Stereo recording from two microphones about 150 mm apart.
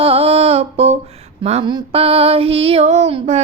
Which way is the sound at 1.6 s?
35° right (ahead or behind).